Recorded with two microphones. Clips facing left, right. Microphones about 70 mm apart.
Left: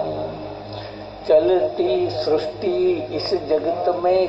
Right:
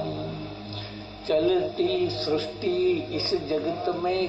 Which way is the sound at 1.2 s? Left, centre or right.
Left.